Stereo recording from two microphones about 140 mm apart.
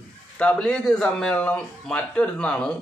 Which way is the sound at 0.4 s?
5° left (ahead or behind).